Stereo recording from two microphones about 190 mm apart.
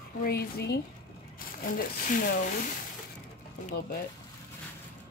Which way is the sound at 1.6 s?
45° left (ahead or behind).